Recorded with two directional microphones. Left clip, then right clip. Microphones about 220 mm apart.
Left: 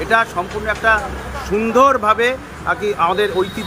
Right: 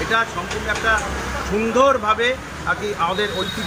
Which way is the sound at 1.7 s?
20° left (ahead or behind).